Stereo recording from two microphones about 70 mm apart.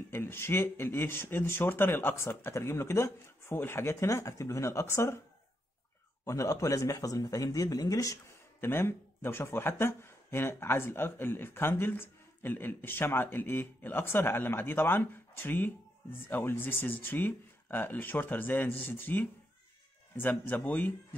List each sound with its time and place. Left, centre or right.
0.1 s speech: left
6.2 s speech: left
8.5 s speech: left